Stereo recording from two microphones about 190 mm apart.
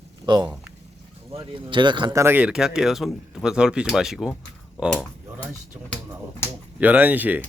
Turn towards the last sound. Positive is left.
turn(degrees=-10)  # may be behind; listen again after turning